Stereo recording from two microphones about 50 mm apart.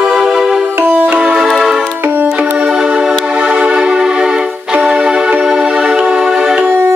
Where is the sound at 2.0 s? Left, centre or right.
Right.